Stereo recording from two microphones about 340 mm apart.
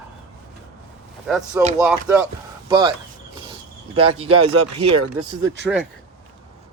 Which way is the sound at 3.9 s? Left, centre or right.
Right.